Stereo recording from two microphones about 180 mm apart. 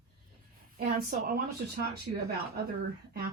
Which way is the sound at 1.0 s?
55° right (ahead or behind).